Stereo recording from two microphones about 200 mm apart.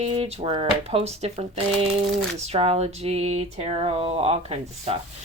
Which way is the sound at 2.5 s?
30° right (ahead or behind).